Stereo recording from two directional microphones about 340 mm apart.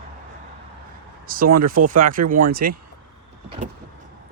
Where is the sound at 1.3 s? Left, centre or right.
Right.